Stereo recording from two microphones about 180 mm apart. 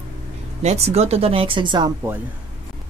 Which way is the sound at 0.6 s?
35° right (ahead or behind).